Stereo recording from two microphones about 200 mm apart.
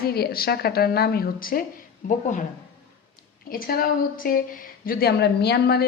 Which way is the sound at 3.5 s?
45° left (ahead or behind).